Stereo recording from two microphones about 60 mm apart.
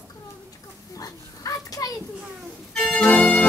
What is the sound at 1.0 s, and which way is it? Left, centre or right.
Children playing, left.